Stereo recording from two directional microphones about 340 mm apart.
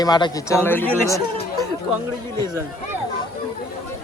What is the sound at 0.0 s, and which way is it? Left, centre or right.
Speech, centre.